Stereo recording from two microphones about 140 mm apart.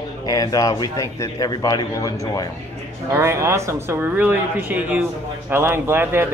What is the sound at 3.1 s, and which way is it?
Speech, 20° right (ahead or behind).